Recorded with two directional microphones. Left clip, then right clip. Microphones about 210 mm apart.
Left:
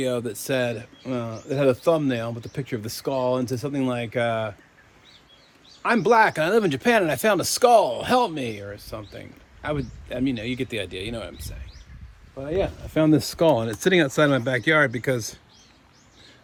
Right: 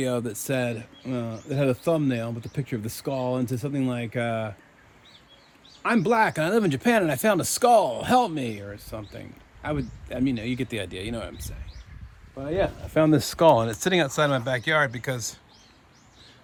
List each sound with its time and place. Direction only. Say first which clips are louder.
0.0 s speech: left 2 dB; 10° right (ahead or behind)
5.8 s speech: left 4 dB; centre (ahead or behind)
12.9 s speech: left 1 dB; 40° right (ahead or behind); by 15.4 s 15° right (ahead or behind)